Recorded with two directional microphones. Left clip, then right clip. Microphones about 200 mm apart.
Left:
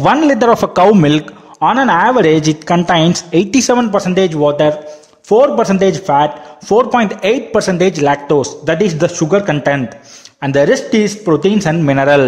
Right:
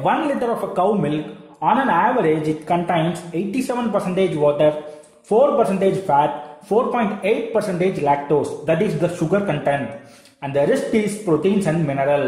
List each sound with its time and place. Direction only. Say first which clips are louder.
0.0 s a man's voice: left 9 dB; 50° left (ahead or behind)